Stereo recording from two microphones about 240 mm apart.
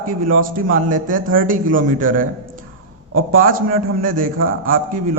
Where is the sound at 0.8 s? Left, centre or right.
Right.